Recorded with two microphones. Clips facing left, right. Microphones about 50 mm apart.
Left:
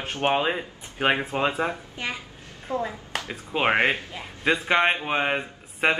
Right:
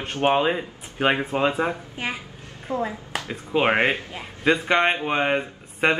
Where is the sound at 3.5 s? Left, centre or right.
Centre.